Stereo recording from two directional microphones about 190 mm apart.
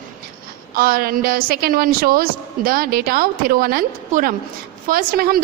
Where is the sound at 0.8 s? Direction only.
50° right (ahead or behind).